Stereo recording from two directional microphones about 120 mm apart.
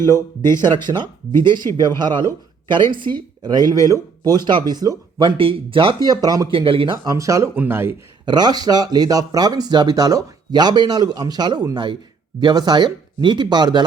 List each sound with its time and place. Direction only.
0.0 s speech: 20° left (ahead or behind)
0.6 s speech: 35° right (ahead or behind)
6.1 s speech: 30° right (ahead or behind)
6.5 s speech: 50° right (ahead or behind)
7.0 s speech: 25° right (ahead or behind)
7.5 s speech: 15° right (ahead or behind)
8.2 s speech: 35° right (ahead or behind)